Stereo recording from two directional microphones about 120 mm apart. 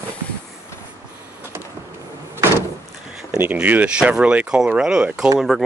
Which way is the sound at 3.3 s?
10° right (ahead or behind).